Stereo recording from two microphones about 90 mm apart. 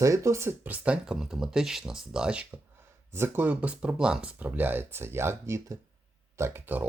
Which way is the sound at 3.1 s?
25° right (ahead or behind).